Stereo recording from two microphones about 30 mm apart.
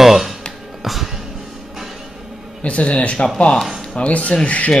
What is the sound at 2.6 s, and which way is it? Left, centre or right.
Speech, left.